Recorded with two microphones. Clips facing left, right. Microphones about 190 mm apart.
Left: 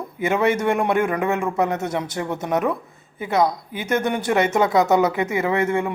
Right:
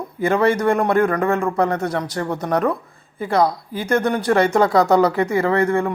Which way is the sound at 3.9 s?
5° left (ahead or behind).